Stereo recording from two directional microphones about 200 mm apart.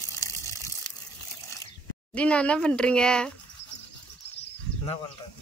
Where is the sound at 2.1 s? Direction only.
5° left (ahead or behind).